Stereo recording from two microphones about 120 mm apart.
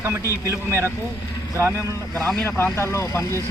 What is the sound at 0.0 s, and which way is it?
Speech, 25° right (ahead or behind).